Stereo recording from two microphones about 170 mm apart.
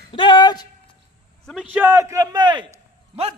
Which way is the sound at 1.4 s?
Centre (ahead or behind).